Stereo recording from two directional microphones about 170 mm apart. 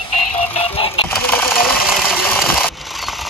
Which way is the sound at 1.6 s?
Centre (ahead or behind).